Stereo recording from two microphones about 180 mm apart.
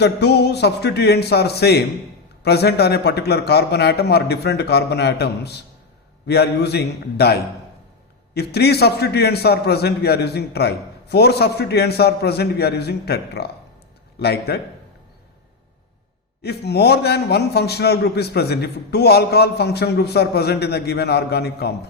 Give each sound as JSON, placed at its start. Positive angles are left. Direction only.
{"t": 0.0, "sound": "a man's voice", "side_deg": 65}
{"t": 16.4, "sound": "a man's voice", "side_deg": 65}